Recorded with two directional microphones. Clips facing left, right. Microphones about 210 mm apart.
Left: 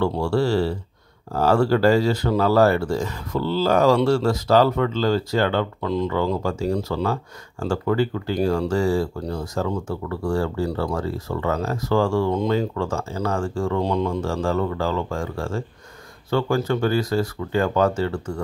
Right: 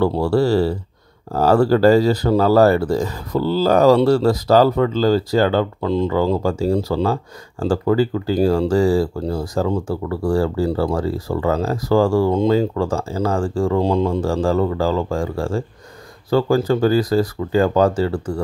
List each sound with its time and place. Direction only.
0.0 s speech: 35° right (ahead or behind)